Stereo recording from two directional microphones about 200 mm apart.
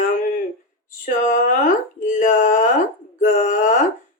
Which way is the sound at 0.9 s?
40° left (ahead or behind).